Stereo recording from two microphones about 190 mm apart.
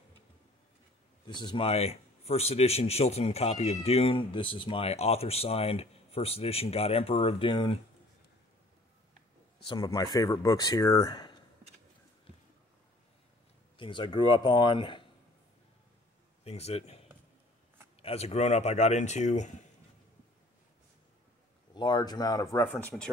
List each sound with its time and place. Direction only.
1.2 s a man's voice: 25° left (ahead or behind)
9.7 s speech: 20° left (ahead or behind)
13.7 s speech: 25° left (ahead or behind)
16.4 s a man's voice: 35° left (ahead or behind)
18.0 s a man's voice: 35° left (ahead or behind)
21.7 s speech: 20° left (ahead or behind)